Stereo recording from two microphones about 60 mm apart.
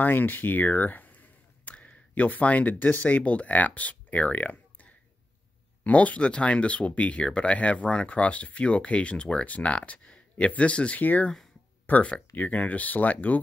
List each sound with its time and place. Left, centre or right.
0.0 s speech: left